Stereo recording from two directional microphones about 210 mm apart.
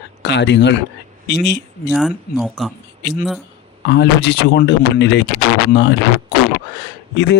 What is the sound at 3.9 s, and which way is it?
Speech, 55° left (ahead or behind).